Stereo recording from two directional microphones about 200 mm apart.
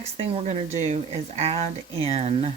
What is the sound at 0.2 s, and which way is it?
Speech, 35° right (ahead or behind).